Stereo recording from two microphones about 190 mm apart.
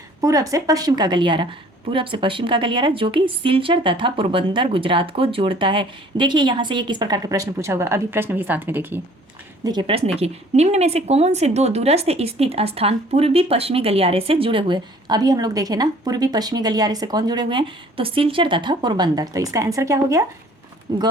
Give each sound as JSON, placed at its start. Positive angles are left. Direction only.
{"t": 0.2, "sound": "a woman's voice", "side_deg": -15}
{"t": 9.6, "sound": "a woman's voice", "side_deg": -25}